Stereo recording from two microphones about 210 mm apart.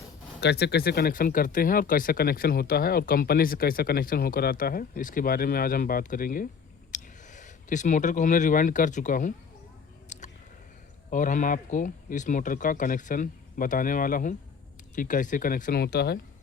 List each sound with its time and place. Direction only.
0.3 s speech: 55° left (ahead or behind)
10.1 s a sound: 35° left (ahead or behind)
11.1 s speech: 40° left (ahead or behind)